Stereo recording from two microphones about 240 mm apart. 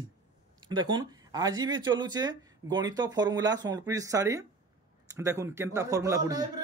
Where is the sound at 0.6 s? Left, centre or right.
Centre.